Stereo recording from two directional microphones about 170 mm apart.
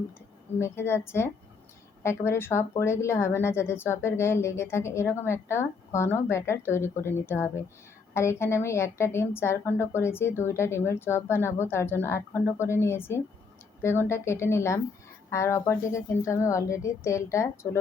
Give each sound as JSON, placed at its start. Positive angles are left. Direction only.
{"t": 0.6, "sound": "speech", "side_deg": 15}